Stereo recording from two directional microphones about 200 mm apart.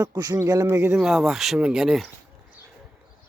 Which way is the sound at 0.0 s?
20° right (ahead or behind).